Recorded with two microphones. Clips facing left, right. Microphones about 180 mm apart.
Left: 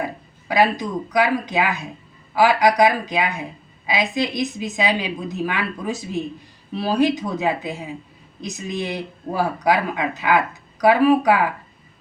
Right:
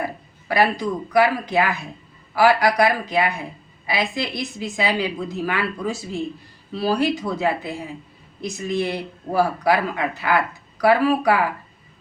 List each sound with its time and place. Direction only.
0.5 s speech: 15° left (ahead or behind)